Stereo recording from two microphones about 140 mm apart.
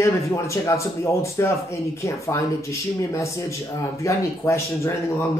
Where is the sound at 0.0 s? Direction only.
20° left (ahead or behind).